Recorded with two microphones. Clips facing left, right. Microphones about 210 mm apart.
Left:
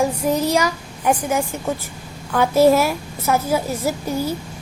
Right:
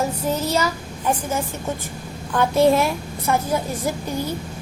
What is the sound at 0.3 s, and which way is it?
A child's voice, 10° left (ahead or behind).